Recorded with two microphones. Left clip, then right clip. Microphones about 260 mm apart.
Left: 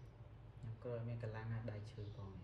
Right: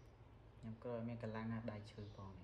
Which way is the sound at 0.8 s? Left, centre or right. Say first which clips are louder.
Right 1 dB; right.